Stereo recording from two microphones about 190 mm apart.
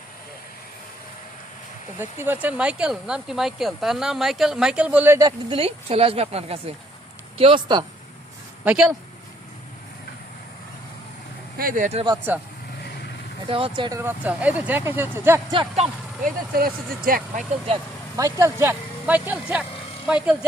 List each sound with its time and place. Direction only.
2.0 s speech: 10° right (ahead or behind)
5.5 s speech: 30° right (ahead or behind)
8.6 s speech: 5° right (ahead or behind)
11.5 s speech: 50° right (ahead or behind)
12.0 s speech: 15° right (ahead or behind)
13.5 s speech: 25° right (ahead or behind)
14.0 s speech: 10° right (ahead or behind)
15.5 s speech: 35° right (ahead or behind)
16.6 s speech: 50° right (ahead or behind)
18.2 s speech: 15° right (ahead or behind)